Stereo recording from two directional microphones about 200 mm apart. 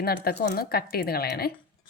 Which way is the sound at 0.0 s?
50° left (ahead or behind).